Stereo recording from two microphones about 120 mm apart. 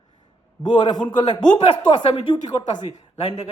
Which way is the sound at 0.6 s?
35° left (ahead or behind).